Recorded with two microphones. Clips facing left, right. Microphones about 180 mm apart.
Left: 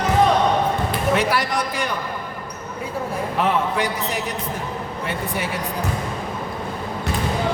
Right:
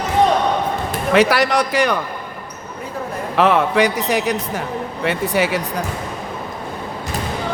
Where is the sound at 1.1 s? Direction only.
80° right.